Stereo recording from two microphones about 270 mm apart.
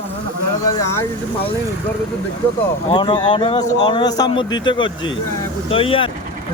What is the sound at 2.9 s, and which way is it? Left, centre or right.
Speech, centre.